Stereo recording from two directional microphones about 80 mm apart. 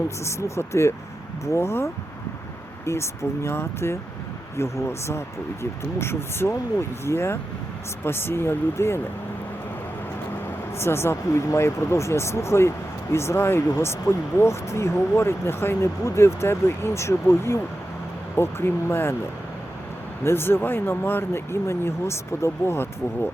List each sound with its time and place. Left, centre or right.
0.3 s speech: left
10.8 s speech: left
20.2 s speech: left